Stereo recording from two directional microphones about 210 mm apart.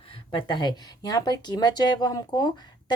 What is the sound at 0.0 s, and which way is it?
A woman's voice, 25° left (ahead or behind).